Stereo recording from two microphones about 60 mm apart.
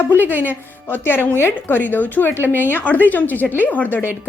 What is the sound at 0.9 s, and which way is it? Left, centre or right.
A woman's voice, left.